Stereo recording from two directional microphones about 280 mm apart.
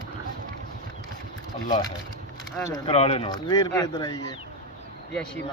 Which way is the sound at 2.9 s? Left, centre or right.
Left.